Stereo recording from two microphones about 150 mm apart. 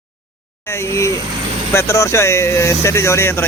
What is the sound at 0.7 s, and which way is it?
Speech, 20° left (ahead or behind).